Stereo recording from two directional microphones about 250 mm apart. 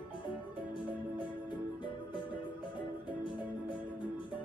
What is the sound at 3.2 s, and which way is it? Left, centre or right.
Music, centre.